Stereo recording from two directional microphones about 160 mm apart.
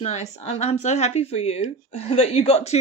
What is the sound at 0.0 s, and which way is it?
Speech, 45° left (ahead or behind).